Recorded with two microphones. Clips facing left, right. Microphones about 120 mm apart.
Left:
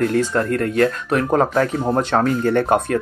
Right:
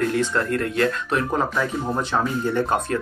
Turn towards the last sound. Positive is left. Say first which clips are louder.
# left 5 dB
turn(degrees=55)  # may be behind; listen again after turning